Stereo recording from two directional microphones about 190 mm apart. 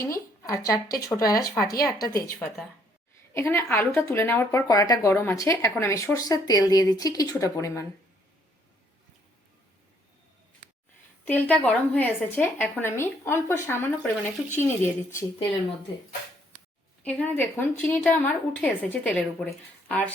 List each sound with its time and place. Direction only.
0.0 s speech: 15° left (ahead or behind)
11.3 s speech: 10° left (ahead or behind)
17.0 s speech: 10° left (ahead or behind)